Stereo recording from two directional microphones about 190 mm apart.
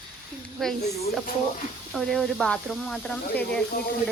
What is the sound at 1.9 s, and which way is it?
Speech, centre (ahead or behind).